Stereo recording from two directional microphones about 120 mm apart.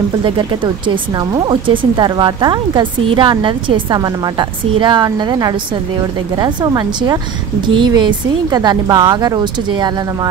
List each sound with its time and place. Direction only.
0.2 s speech: 45° right (ahead or behind)